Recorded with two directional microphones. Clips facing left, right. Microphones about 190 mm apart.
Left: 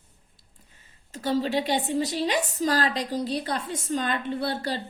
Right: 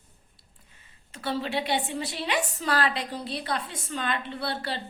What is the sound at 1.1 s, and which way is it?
A woman's voice, 40° left (ahead or behind).